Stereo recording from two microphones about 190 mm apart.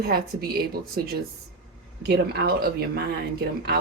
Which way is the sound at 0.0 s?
55° right (ahead or behind).